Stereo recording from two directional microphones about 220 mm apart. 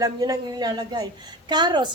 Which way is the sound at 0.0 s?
15° right (ahead or behind).